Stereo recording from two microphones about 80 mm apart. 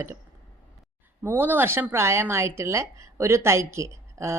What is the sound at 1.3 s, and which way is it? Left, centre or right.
A woman's voice, right.